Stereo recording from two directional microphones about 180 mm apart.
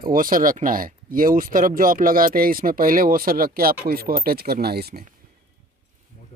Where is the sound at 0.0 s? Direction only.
50° right (ahead or behind).